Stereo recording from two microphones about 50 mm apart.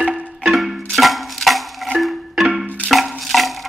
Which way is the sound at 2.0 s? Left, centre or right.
Centre.